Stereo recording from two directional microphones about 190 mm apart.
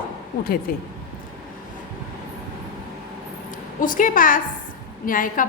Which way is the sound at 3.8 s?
45° left (ahead or behind).